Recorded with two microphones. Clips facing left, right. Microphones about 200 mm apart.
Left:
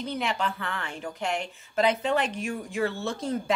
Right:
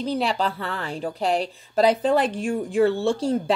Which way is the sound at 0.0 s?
35° right (ahead or behind).